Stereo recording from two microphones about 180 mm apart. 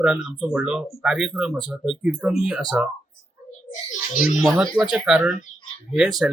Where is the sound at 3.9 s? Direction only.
40° left (ahead or behind).